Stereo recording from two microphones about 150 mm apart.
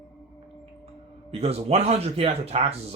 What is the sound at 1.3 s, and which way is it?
Speech, 45° right (ahead or behind).